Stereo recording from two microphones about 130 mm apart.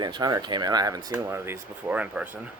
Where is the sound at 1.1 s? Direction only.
15° right (ahead or behind).